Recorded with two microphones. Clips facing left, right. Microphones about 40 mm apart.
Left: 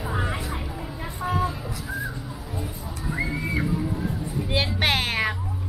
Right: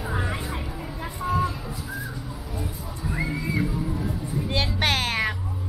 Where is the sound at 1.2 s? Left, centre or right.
Centre.